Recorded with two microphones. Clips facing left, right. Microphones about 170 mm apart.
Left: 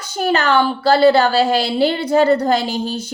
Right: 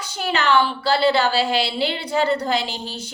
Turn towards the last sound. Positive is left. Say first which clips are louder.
# left 8 dB
turn(degrees=45)  # may be behind; listen again after turning